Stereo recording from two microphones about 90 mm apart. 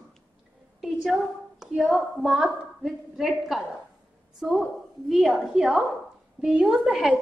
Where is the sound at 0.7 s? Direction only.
Centre (ahead or behind).